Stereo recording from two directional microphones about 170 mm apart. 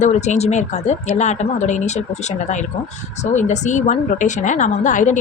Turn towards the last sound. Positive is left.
turn(degrees=50)  # may be behind; listen again after turning